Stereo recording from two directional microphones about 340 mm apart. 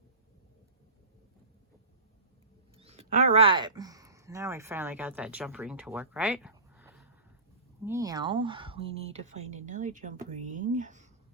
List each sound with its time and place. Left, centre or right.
2.7 s speech: centre